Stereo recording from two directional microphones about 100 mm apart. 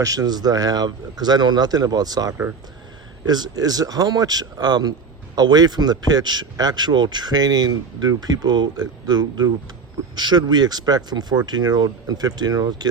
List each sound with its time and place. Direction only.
0.0 s speech: 35° right (ahead or behind)